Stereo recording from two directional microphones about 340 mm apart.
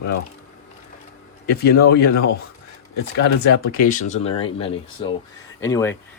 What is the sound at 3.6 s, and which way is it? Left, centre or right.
Speech, left.